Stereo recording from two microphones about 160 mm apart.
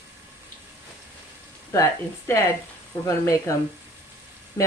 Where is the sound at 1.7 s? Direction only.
20° left (ahead or behind).